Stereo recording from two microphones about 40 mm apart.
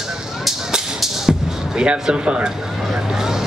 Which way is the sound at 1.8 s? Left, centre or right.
Right.